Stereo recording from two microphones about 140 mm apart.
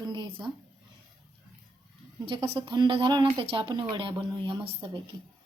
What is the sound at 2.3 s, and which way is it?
A woman's voice, 40° right (ahead or behind).